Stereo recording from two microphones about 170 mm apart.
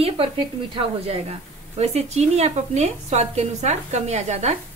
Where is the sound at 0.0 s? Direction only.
30° right (ahead or behind).